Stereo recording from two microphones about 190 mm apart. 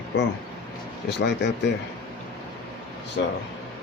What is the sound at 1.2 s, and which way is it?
Speech, 65° left (ahead or behind).